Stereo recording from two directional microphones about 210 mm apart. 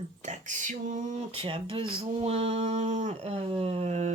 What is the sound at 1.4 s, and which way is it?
Speech, 25° right (ahead or behind).